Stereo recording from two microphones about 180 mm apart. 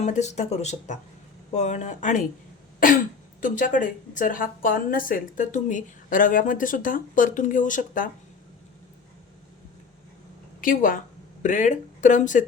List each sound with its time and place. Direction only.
0.0 s speech: 40° left (ahead or behind)
3.4 s a woman's voice: 45° left (ahead or behind)
10.6 s a woman's voice: 50° left (ahead or behind)